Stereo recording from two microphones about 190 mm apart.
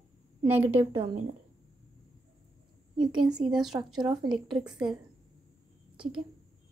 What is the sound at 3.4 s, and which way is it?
Speech, 30° right (ahead or behind).